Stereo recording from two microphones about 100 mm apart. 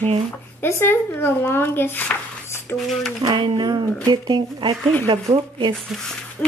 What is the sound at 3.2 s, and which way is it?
Speech, 50° right (ahead or behind).